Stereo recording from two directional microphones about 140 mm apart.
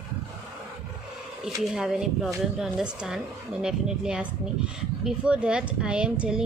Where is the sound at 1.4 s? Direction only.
5° right (ahead or behind).